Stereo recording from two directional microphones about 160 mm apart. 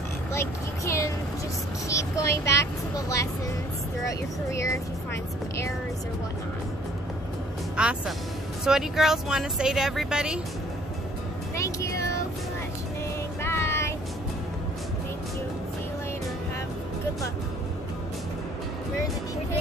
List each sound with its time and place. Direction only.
0.3 s vehicle: 15° left (ahead or behind)
1.9 s speech: 20° left (ahead or behind)
4.5 s speech: 20° left (ahead or behind)
7.8 s speech: 5° right (ahead or behind)
11.5 s speech: 20° left (ahead or behind)
13.4 s a sound: 15° left (ahead or behind)